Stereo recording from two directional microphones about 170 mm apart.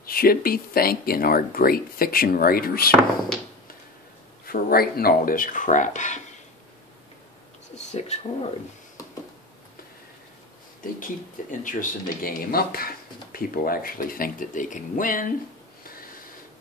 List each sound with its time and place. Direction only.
0.0 s speech: 60° left (ahead or behind)
4.5 s speech: 60° left (ahead or behind); by 6.2 s 45° left (ahead or behind)
7.9 s speech: 40° left (ahead or behind)
11.6 s speech: 55° left (ahead or behind)